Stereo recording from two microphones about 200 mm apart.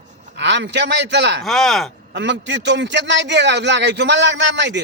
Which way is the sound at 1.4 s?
Centre (ahead or behind).